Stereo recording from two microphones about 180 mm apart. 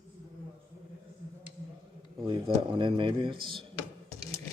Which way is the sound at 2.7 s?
25° right (ahead or behind).